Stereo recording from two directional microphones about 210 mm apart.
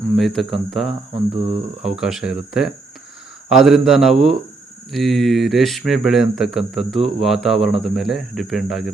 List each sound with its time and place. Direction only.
0.2 s speech: centre (ahead or behind)
1.1 s speech: 25° right (ahead or behind)
2.0 s speech: 5° right (ahead or behind)